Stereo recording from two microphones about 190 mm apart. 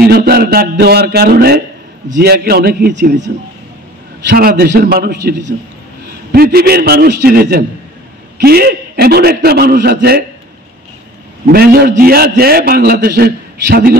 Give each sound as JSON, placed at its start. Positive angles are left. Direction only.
{"t": 0.0, "sound": "a man's voice", "side_deg": -55}
{"t": 4.3, "sound": "a man's voice", "side_deg": -55}
{"t": 11.5, "sound": "a man's voice", "side_deg": -55}